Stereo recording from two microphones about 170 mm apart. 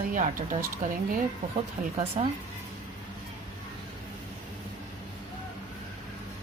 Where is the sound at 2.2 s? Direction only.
35° right (ahead or behind).